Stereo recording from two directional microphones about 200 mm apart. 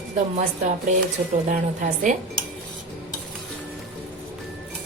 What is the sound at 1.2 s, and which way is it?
Cutlery, 40° right (ahead or behind).